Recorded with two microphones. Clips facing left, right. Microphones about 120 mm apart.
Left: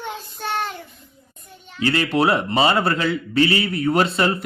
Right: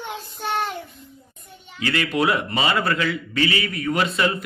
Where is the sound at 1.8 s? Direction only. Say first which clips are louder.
Left 3 dB; 35° left (ahead or behind).